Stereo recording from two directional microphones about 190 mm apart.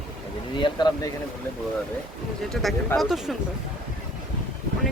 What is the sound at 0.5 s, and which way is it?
Speech, 25° left (ahead or behind).